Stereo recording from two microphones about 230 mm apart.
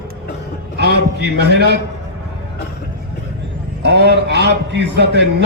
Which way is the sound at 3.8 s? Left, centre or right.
Right.